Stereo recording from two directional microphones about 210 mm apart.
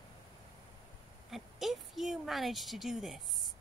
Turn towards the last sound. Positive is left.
turn(degrees=0)  # may be behind; listen again after turning